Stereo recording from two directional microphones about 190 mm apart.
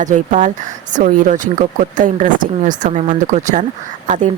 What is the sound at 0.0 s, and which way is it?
Speech, 40° right (ahead or behind).